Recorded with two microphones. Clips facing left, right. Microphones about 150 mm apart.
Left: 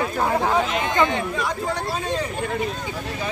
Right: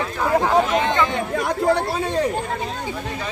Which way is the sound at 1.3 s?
60° right (ahead or behind).